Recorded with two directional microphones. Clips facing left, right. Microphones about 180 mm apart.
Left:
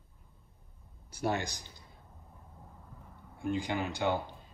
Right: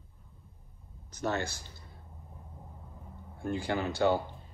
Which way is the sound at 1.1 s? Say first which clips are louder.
Even; 10° left (ahead or behind).